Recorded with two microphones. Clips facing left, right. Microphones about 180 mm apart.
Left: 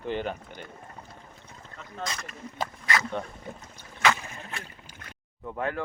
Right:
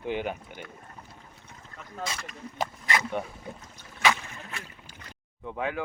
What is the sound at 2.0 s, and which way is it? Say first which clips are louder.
Speech: even; 5° right (ahead or behind).